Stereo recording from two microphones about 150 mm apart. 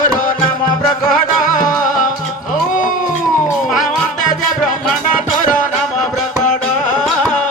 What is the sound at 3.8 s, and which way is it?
Music, 60° left (ahead or behind).